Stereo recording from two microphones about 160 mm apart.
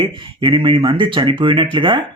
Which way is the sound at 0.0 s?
30° right (ahead or behind).